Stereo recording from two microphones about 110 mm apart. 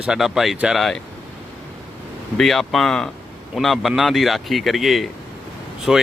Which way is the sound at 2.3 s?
Centre (ahead or behind).